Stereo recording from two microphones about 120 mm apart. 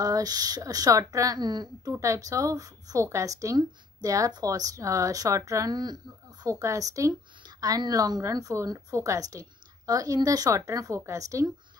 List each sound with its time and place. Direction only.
0.0 s speech: 30° right (ahead or behind)